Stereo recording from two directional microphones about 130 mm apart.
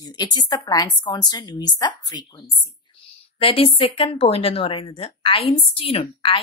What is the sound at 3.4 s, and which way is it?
Speech, 45° left (ahead or behind).